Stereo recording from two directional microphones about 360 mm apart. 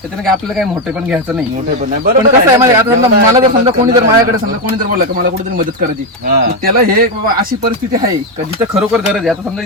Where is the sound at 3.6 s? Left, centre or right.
Centre.